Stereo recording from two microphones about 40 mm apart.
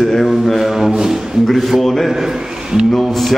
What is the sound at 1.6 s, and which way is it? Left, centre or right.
A man's voice, centre.